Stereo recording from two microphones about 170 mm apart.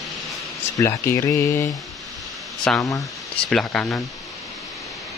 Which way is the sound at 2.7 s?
5° left (ahead or behind).